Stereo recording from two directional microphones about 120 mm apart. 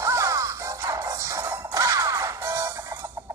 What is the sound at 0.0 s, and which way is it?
Music, 25° right (ahead or behind).